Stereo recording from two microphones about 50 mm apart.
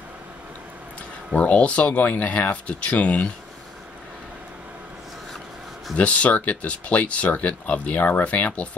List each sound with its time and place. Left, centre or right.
1.3 s speech: left
5.9 s speech: left